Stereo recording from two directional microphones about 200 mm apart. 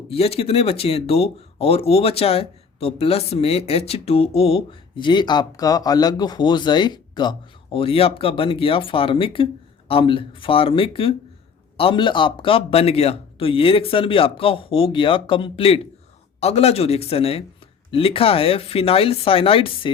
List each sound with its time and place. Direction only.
0.1 s a man's voice: 30° left (ahead or behind)